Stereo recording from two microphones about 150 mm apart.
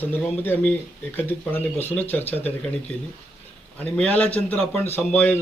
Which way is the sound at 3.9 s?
5° left (ahead or behind).